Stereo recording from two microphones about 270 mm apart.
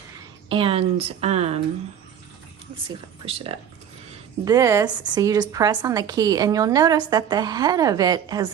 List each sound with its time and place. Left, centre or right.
0.4 s speech: centre
2.9 s a woman's voice: right